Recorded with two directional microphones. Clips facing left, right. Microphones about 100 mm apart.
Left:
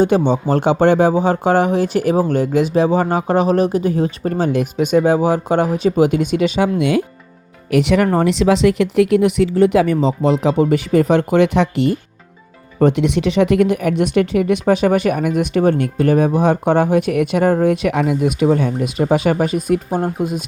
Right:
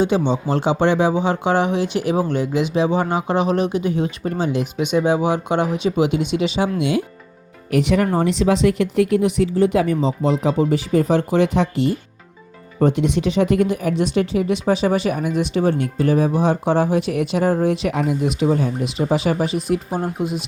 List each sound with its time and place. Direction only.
0.0 s speech: 45° left (ahead or behind)
7.7 s speech: 80° left; by 18.9 s 65° left (ahead or behind)
18.9 s speech: 50° left (ahead or behind)